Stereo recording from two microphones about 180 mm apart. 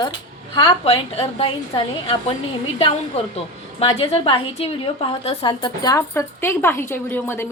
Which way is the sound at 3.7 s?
30° left (ahead or behind).